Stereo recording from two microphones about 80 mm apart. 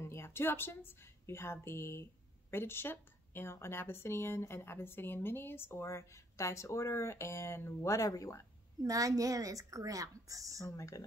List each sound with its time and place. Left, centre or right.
0.0 s a woman's voice: left
8.8 s a woman's voice: right
10.6 s speech: left